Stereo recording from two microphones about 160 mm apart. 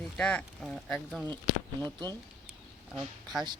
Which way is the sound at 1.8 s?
25° right (ahead or behind).